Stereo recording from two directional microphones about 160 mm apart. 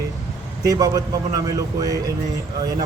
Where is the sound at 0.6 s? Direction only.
25° right (ahead or behind).